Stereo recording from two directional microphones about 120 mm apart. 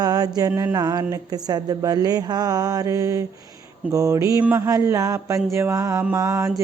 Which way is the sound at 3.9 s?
25° right (ahead or behind).